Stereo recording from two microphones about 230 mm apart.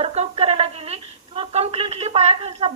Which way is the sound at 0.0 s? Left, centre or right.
Right.